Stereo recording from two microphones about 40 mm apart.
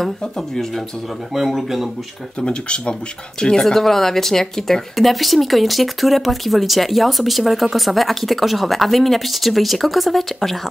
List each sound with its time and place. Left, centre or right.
1.3 s a man's voice: centre
2.4 s speech: left; by 10.7 s centre